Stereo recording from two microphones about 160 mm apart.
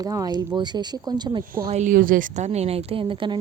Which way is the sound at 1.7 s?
50° right (ahead or behind).